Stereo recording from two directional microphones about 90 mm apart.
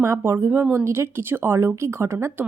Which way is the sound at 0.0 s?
30° right (ahead or behind).